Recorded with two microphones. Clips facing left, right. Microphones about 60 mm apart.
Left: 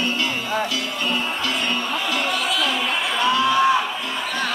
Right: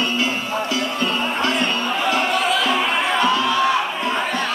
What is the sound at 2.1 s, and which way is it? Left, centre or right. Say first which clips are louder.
Music: right 6 dB; right.